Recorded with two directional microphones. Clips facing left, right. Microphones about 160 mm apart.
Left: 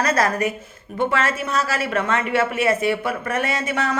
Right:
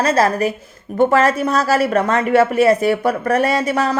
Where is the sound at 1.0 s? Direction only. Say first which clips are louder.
Right 8 dB; 40° right (ahead or behind).